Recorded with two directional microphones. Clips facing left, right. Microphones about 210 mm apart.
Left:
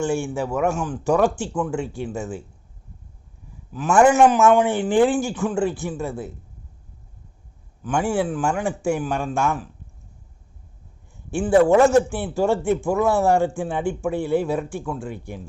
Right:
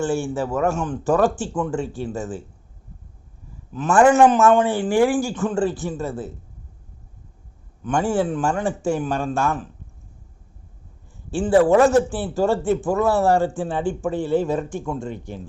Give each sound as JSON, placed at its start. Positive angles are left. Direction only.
{"t": 0.0, "sound": "speech", "side_deg": 15}
{"t": 3.7, "sound": "a man's voice", "side_deg": 5}
{"t": 7.9, "sound": "speech", "side_deg": 10}
{"t": 11.3, "sound": "a man's voice", "side_deg": 15}